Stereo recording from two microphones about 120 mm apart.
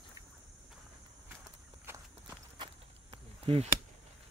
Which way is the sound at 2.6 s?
55° right (ahead or behind).